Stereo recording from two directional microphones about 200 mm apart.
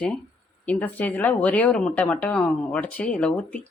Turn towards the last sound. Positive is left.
turn(degrees=5)  # may be behind; listen again after turning